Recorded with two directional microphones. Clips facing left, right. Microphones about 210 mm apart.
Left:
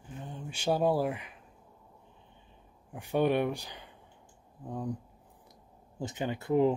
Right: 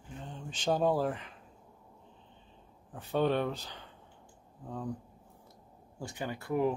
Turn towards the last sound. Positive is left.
turn(degrees=25)  # may be behind; listen again after turning